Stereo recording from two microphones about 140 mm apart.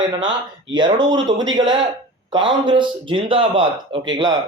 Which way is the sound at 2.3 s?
35° right (ahead or behind).